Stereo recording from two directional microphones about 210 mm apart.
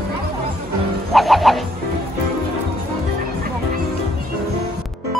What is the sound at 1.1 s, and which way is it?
Music, centre (ahead or behind).